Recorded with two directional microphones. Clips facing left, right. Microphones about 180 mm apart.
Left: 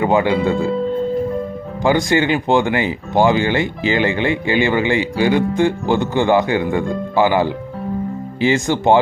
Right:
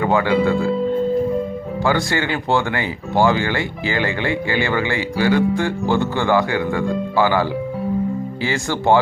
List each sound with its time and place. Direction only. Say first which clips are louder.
0.0 s speech: left 1 dB; 20° left (ahead or behind)
1.8 s speech: left 5 dB; 20° left (ahead or behind)